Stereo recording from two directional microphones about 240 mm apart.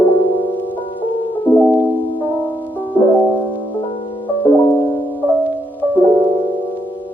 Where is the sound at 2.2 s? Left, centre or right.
Centre.